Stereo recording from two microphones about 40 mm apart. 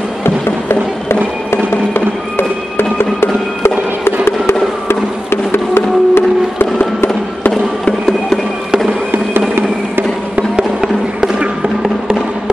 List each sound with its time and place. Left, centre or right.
0.2 s music: left
4.8 s music: left